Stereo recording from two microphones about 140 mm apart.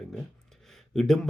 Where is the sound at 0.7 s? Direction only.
Centre (ahead or behind).